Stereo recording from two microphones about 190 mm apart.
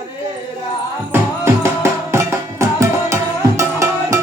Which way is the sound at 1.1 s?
15° right (ahead or behind).